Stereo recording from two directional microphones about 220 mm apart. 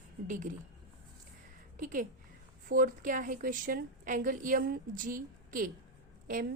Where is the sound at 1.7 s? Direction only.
35° right (ahead or behind).